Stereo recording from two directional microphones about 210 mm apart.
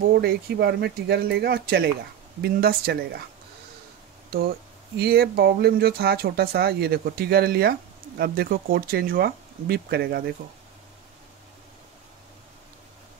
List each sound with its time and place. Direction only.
0.1 s speech: 50° right (ahead or behind)
4.9 s speech: 50° right (ahead or behind)